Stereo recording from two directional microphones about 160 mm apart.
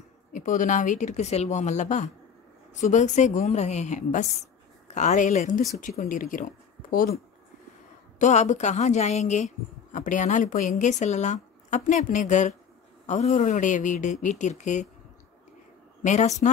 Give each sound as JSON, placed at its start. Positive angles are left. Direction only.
{"t": 0.3, "sound": "speech", "side_deg": 50}
{"t": 8.2, "sound": "speech", "side_deg": 45}
{"t": 16.0, "sound": "speech", "side_deg": 50}